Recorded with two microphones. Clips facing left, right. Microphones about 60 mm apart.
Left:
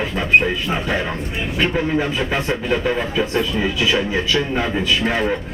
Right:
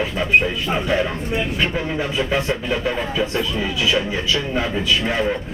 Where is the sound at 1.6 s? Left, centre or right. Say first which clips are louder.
Left 3 dB; centre.